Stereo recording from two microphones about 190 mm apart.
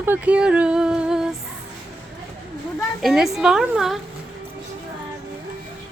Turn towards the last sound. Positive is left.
turn(degrees=0)  # may be behind; listen again after turning